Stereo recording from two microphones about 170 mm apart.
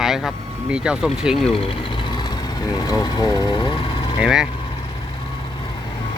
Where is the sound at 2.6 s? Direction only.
20° left (ahead or behind).